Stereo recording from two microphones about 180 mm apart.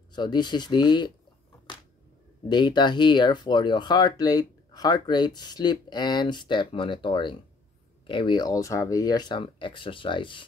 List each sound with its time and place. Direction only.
0.1 s speech: 25° left (ahead or behind)
2.4 s speech: 25° left (ahead or behind)